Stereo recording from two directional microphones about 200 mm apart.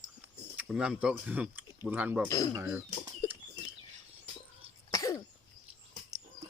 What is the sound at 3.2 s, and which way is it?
Bird flight, 15° left (ahead or behind).